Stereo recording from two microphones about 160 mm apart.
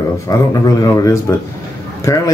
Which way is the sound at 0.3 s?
20° left (ahead or behind).